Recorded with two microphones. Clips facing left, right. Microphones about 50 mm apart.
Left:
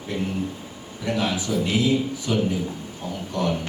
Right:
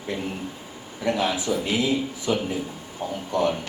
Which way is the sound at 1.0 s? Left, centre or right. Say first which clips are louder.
Right 1 dB; right.